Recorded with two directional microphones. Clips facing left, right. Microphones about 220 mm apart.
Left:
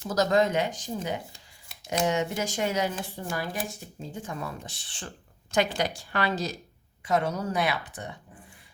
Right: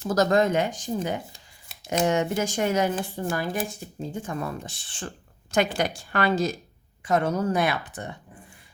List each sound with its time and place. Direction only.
0.1 s speech: 50° right (ahead or behind)